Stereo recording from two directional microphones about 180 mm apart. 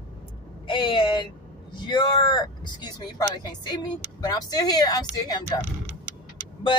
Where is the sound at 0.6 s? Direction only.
25° left (ahead or behind).